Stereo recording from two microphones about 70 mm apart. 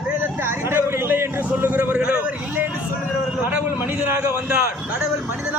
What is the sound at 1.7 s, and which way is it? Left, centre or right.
Speech, right.